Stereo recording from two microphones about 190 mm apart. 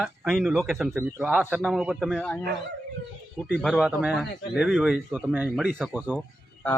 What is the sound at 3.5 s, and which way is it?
Speech, centre (ahead or behind).